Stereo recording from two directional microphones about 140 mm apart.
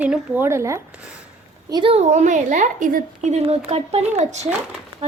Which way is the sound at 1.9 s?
55° right (ahead or behind).